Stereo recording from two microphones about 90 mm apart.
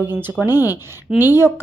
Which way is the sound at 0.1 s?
20° right (ahead or behind).